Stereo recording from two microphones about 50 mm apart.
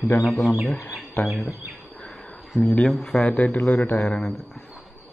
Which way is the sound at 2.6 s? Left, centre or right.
Left.